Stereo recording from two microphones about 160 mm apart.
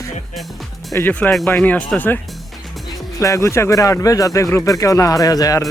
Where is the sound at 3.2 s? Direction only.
20° left (ahead or behind).